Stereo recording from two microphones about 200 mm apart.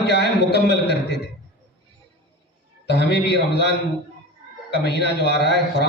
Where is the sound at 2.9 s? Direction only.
55° left (ahead or behind).